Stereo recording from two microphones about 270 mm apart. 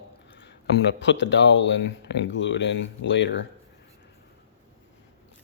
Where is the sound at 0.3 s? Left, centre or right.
Left.